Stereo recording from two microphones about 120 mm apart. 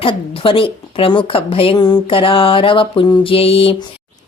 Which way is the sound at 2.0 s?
50° left (ahead or behind).